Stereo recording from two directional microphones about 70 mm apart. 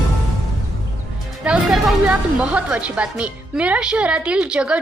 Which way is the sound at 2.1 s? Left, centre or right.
Centre.